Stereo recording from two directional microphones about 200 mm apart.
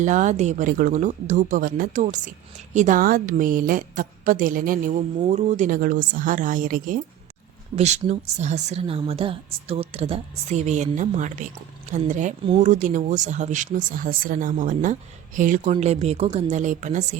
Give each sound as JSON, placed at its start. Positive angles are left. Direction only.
{"t": 0.0, "sound": "a woman's voice", "side_deg": -40}
{"t": 15.6, "sound": "speech", "side_deg": -30}